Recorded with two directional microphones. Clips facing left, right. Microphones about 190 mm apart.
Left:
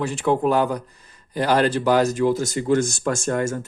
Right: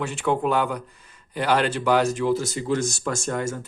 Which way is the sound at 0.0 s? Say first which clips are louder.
Left 3 dB; 35° left (ahead or behind).